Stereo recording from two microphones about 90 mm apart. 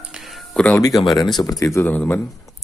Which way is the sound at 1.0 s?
55° left (ahead or behind).